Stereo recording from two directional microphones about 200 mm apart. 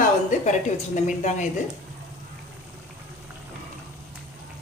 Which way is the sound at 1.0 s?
40° left (ahead or behind).